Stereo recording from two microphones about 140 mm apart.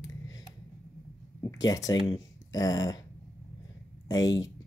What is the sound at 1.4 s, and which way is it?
Speech, 25° left (ahead or behind).